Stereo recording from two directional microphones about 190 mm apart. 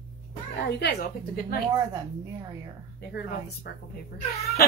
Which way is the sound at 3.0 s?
55° left (ahead or behind).